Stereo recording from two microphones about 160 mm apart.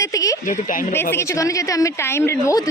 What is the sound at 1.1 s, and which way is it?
A woman's voice, 15° left (ahead or behind).